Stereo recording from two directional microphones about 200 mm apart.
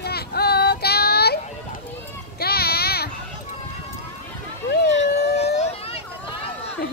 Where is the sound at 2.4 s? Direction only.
50° left (ahead or behind).